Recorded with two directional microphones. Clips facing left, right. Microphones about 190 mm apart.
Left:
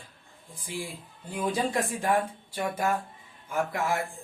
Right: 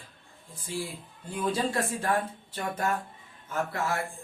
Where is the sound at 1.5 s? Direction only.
15° left (ahead or behind).